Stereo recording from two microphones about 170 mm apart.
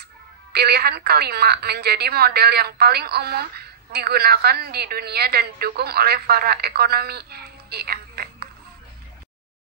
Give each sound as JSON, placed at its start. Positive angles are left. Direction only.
{"t": 0.5, "sound": "a woman's voice", "side_deg": -70}